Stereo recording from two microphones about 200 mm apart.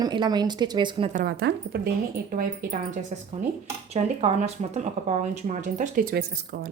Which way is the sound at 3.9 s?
35° right (ahead or behind).